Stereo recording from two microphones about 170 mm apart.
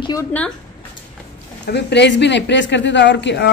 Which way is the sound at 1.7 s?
80° left.